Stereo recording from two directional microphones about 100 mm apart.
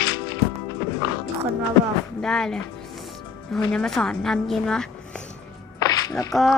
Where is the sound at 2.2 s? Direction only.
5° left (ahead or behind).